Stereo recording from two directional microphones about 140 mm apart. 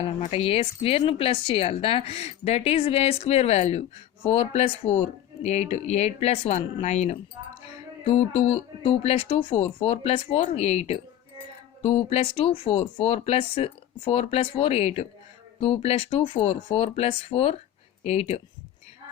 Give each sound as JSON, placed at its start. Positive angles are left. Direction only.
{"t": 0.0, "sound": "a woman's voice", "side_deg": 50}